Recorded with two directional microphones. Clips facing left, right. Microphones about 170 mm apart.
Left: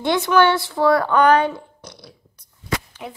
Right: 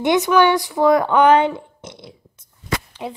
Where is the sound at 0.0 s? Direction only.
20° right (ahead or behind).